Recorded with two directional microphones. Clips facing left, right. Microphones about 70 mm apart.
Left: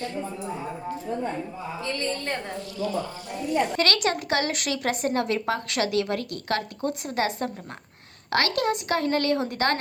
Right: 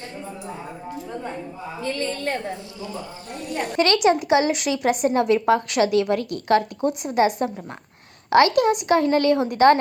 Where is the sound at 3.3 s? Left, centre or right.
Right.